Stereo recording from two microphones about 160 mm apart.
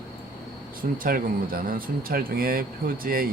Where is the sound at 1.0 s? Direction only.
60° right (ahead or behind).